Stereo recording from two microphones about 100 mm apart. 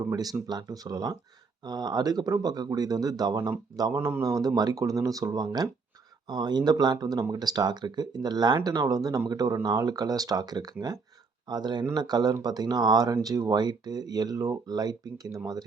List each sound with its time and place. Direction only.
0.4 s speech: 40° right (ahead or behind)
3.9 s speech: 30° right (ahead or behind)